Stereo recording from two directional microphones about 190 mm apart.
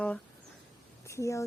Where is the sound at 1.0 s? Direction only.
15° left (ahead or behind).